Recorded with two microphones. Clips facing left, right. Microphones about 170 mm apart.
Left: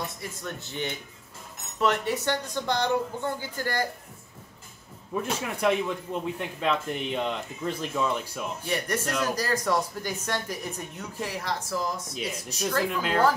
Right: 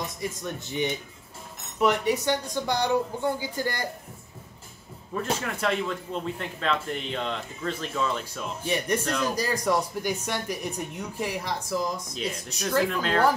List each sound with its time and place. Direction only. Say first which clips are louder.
0.0 s speech: right 3 dB; 15° right (ahead or behind)
5.1 s speech: right 1 dB; 10° left (ahead or behind)
8.6 s speech: right 3 dB; 15° right (ahead or behind)
12.1 s speech: right 1 dB; 10° left (ahead or behind)